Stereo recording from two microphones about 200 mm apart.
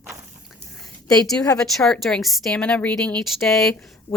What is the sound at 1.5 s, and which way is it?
A woman's voice, 5° left (ahead or behind).